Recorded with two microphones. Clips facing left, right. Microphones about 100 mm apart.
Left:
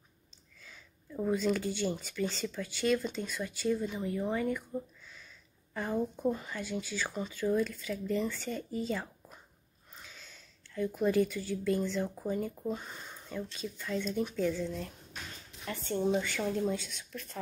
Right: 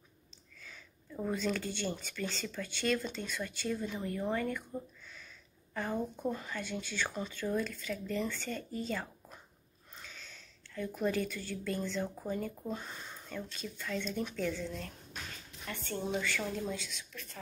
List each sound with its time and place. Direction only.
1.1 s speech: 5° left (ahead or behind)
5.8 s speech: 15° left (ahead or behind)
11.0 s speech: 10° left (ahead or behind)
15.7 s a woman's voice: 30° left (ahead or behind)